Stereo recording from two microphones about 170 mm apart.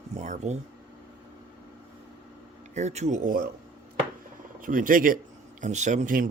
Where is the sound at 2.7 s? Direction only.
40° right (ahead or behind).